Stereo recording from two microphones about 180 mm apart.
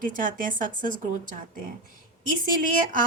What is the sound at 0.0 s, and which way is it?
Speech, 45° right (ahead or behind).